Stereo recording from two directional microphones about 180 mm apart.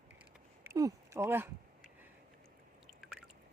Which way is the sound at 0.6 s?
15° right (ahead or behind).